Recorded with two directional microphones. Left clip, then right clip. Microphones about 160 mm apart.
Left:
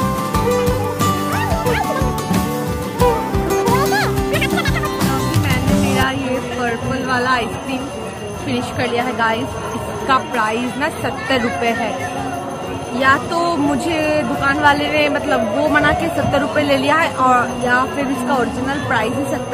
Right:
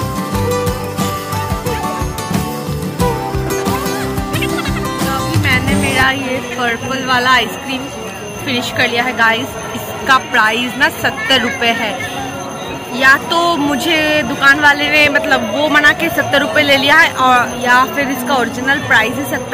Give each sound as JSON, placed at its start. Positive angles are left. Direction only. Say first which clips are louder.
{"t": 0.4, "sound": "music", "louder": "even", "side_deg": 0}
{"t": 3.0, "sound": "music", "louder": "left 2 dB", "side_deg": 0}
{"t": 4.0, "sound": "music", "louder": "left 1 dB", "side_deg": 35}
{"t": 5.3, "sound": "music", "louder": "right 5 dB", "side_deg": 0}
{"t": 6.6, "sound": "speech", "louder": "right 3 dB", "side_deg": 0}
{"t": 8.5, "sound": "speech", "louder": "right 5 dB", "side_deg": 5}
{"t": 13.0, "sound": "speech", "louder": "right 5 dB", "side_deg": 0}